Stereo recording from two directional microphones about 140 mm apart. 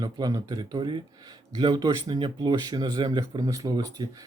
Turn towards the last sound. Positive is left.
turn(degrees=-25)  # may be behind; listen again after turning